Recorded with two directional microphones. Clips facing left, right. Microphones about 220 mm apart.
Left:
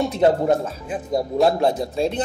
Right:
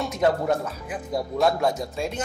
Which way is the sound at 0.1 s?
30° left (ahead or behind).